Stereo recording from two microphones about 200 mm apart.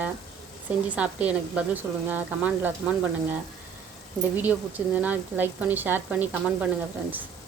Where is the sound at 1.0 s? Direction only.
5° right (ahead or behind).